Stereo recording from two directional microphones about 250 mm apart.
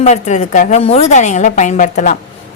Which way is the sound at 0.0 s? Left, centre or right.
Left.